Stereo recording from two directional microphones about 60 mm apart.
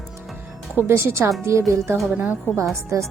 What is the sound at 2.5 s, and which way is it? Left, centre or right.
Speech, left.